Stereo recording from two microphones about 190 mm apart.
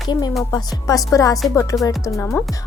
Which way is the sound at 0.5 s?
20° left (ahead or behind).